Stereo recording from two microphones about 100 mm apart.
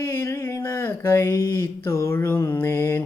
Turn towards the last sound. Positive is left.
turn(degrees=25)  # may be behind; listen again after turning